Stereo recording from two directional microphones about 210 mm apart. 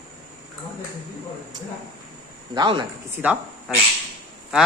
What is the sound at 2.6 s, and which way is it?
Speech, 20° right (ahead or behind).